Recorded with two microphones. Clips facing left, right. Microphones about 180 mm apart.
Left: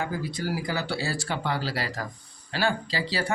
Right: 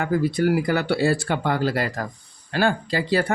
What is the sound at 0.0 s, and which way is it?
Speech, 60° right (ahead or behind).